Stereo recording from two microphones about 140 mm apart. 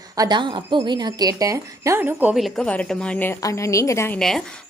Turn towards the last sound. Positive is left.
turn(degrees=15)  # may be behind; listen again after turning